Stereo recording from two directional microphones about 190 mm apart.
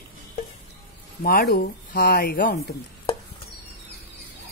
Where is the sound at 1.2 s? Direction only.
50° left (ahead or behind).